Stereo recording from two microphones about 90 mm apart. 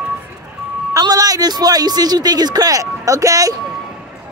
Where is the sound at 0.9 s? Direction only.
45° right (ahead or behind).